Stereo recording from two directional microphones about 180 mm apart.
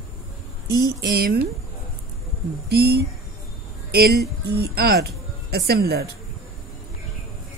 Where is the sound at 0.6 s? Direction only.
60° right (ahead or behind).